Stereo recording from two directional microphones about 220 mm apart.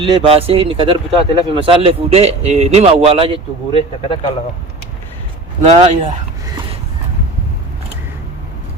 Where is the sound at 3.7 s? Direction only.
25° left (ahead or behind).